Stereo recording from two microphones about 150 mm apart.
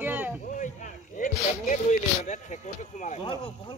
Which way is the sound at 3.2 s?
35° left (ahead or behind).